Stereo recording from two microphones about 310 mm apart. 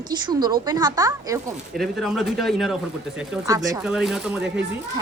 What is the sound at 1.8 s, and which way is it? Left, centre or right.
Speech, centre.